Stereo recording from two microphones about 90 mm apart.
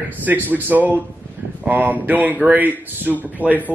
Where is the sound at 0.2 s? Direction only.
20° right (ahead or behind).